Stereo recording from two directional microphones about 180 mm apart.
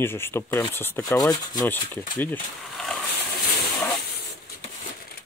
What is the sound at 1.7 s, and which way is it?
Speech, 10° left (ahead or behind).